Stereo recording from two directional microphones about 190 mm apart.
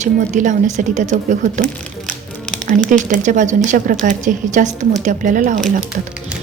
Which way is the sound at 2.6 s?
40° right (ahead or behind).